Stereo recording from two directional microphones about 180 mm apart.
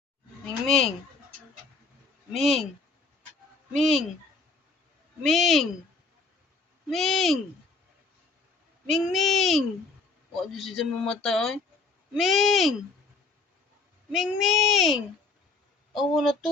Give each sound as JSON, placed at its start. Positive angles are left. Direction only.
{"t": 2.3, "sound": "speech", "side_deg": 0}
{"t": 3.7, "sound": "speech", "side_deg": 0}
{"t": 5.2, "sound": "speech", "side_deg": 0}
{"t": 6.8, "sound": "speech", "side_deg": 0}
{"t": 8.9, "sound": "speech", "side_deg": 0}
{"t": 14.1, "sound": "speech", "side_deg": 0}